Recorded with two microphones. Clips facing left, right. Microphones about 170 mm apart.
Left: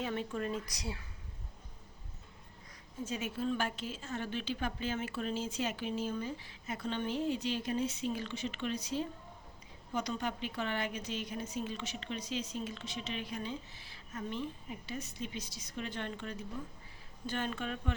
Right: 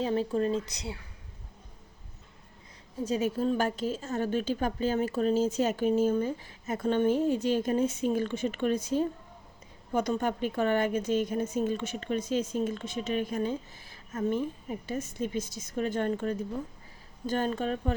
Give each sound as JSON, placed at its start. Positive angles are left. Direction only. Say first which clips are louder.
{"t": 0.0, "sound": "speech", "louder": "right 9 dB", "side_deg": -30}
{"t": 3.1, "sound": "a woman's voice", "louder": "right 8 dB", "side_deg": -40}